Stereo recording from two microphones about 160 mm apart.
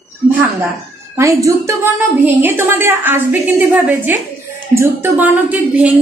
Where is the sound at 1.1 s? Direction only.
20° right (ahead or behind).